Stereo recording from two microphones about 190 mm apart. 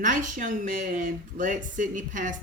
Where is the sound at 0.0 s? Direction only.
40° right (ahead or behind).